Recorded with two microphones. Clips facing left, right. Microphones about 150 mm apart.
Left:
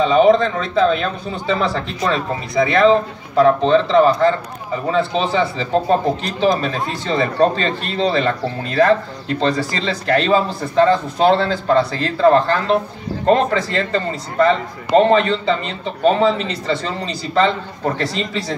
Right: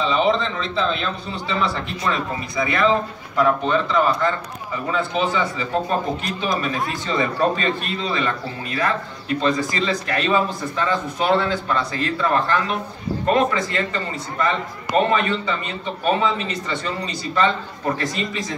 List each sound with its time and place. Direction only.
0.0 s a man's voice: 45° left (ahead or behind)